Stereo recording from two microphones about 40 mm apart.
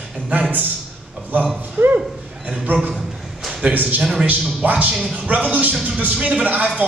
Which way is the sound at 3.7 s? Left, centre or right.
Right.